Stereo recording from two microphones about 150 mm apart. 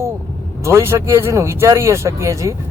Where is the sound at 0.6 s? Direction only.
20° right (ahead or behind).